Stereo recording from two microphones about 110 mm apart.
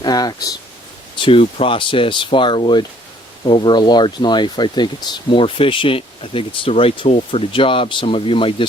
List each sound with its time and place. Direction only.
0.0 s speech: 35° left (ahead or behind)
1.1 s speech: 55° left (ahead or behind)